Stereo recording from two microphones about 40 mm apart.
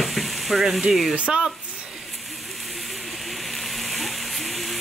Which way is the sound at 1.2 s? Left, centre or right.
Right.